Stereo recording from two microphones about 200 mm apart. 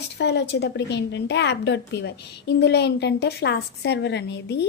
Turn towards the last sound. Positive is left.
turn(degrees=55)  # may be behind; listen again after turning